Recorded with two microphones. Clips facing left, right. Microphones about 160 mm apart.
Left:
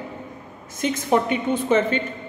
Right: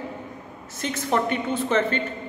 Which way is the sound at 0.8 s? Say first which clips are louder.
Left 4 dB; 10° left (ahead or behind).